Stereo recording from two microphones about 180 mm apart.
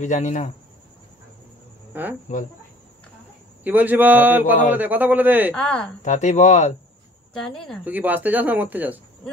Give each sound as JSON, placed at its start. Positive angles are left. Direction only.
{"t": 0.0, "sound": "speech", "side_deg": 40}
{"t": 1.9, "sound": "speech", "side_deg": -10}
{"t": 3.6, "sound": "speech", "side_deg": -10}
{"t": 5.5, "sound": "a woman's voice", "side_deg": 5}
{"t": 6.0, "sound": "speech", "side_deg": 40}
{"t": 7.4, "sound": "a woman's voice", "side_deg": 0}
{"t": 7.8, "sound": "speech", "side_deg": -10}